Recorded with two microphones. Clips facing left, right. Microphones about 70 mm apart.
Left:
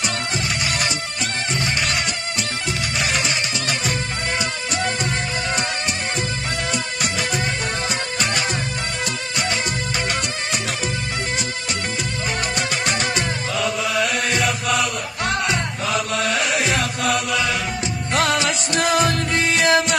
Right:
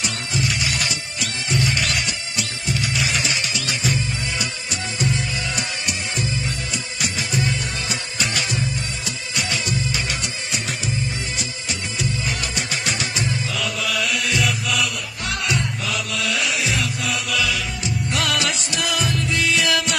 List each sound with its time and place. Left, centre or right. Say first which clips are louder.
0.4 s music: even; left
6.7 s music: left 4 dB; left
13.6 s mantra: left 6 dB; left
15.4 s music: left 2 dB; left
17.3 s chant: left 2 dB; left
18.1 s music: left 5 dB; left
18.8 s music: left 6 dB; left